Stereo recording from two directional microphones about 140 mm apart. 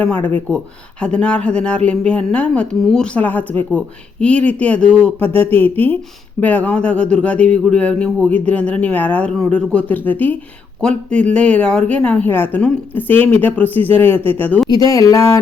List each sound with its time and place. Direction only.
0.0 s speech: 10° left (ahead or behind)
14.8 s speech: 25° left (ahead or behind)